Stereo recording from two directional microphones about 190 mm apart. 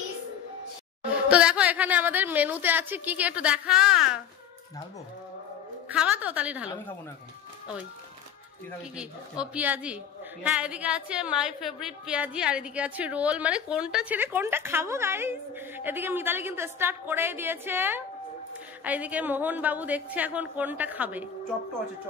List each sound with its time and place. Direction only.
1.3 s a woman's voice: 5° right (ahead or behind)
5.9 s a woman's voice: 10° right (ahead or behind)
8.9 s a woman's voice: 5° right (ahead or behind)